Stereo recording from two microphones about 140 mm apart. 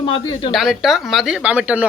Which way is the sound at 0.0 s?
40° left (ahead or behind).